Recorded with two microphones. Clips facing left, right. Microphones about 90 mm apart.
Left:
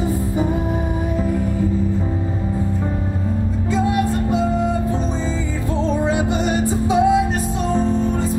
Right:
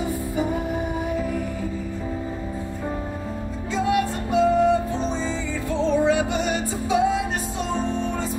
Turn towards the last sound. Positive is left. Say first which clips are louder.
# left 5 dB
turn(degrees=30)  # may be behind; listen again after turning